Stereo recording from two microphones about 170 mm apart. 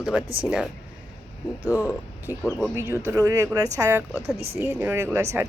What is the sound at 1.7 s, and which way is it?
Speech, 10° right (ahead or behind).